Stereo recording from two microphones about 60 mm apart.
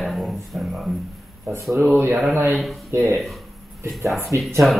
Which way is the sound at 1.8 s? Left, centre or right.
Right.